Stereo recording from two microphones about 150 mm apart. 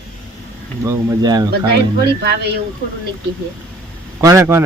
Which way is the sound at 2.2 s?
90° right.